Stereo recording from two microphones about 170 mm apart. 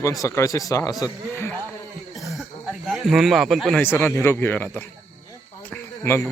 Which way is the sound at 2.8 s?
Centre (ahead or behind).